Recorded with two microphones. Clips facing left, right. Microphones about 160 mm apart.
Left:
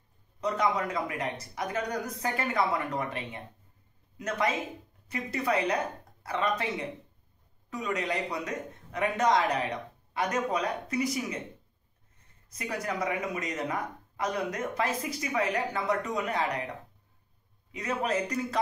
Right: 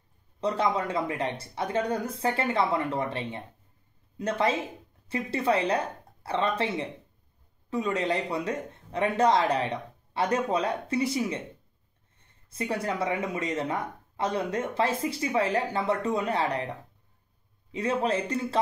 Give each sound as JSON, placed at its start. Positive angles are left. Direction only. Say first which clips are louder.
{"t": 0.4, "sound": "speech", "louder": "right 2 dB", "side_deg": -30}
{"t": 12.4, "sound": "speech", "louder": "right 4 dB", "side_deg": -30}